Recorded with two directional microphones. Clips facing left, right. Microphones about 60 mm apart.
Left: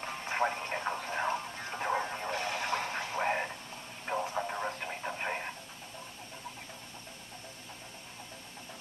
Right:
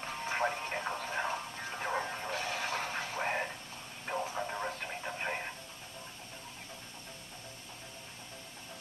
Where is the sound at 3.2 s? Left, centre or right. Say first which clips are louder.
Left 4 dB; centre.